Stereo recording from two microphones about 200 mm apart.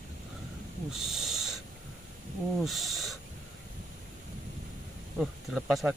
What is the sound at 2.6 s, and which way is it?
Speech, centre (ahead or behind).